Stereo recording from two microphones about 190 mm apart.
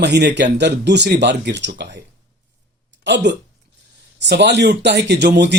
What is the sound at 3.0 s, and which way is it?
Speech, 65° right (ahead or behind).